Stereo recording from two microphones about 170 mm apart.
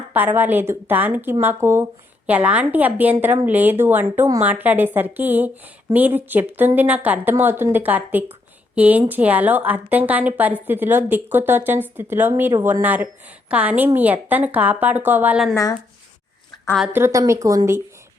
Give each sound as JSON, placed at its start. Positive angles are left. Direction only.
{"t": 0.1, "sound": "a woman's voice", "side_deg": -10}
{"t": 15.5, "sound": "speech", "side_deg": 20}
{"t": 16.9, "sound": "a woman's voice", "side_deg": -15}